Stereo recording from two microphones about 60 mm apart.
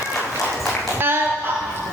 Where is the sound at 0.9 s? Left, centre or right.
Right.